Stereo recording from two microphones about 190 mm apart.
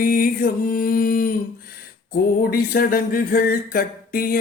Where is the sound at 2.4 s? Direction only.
50° left (ahead or behind).